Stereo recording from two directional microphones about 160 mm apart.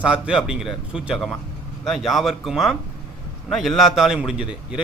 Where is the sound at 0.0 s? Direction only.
5° right (ahead or behind).